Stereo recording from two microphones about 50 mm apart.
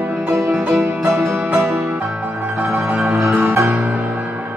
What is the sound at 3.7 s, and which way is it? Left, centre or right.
Music, right.